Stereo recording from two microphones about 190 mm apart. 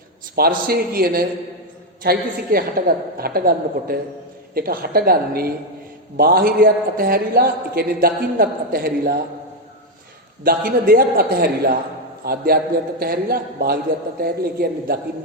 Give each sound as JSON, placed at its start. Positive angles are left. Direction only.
{"t": 0.3, "sound": "a man's voice", "side_deg": -55}
{"t": 10.4, "sound": "a man's voice", "side_deg": -50}